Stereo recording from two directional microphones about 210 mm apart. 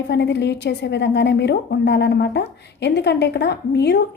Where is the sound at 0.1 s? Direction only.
55° left (ahead or behind).